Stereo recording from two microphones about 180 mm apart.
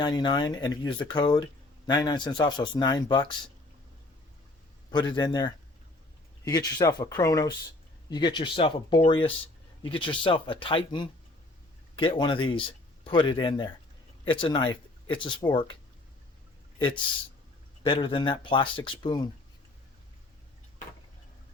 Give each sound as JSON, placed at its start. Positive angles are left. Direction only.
{"t": 0.0, "sound": "speech", "side_deg": 25}
{"t": 4.9, "sound": "speech", "side_deg": 25}
{"t": 17.8, "sound": "speech", "side_deg": 30}